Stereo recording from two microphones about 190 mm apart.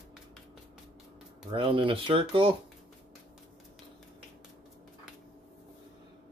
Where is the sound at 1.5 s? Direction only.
25° right (ahead or behind).